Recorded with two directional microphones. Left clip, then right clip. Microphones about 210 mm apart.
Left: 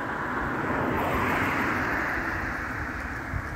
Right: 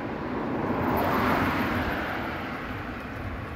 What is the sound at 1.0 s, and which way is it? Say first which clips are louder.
Vehicle: right 3 dB; 35° right (ahead or behind).